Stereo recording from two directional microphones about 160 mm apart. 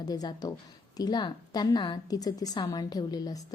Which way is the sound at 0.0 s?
25° left (ahead or behind).